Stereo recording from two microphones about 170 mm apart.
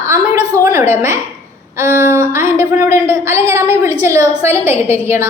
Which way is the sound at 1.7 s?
15° right (ahead or behind).